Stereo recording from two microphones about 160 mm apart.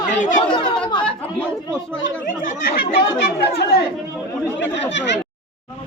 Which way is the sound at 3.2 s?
70° left (ahead or behind).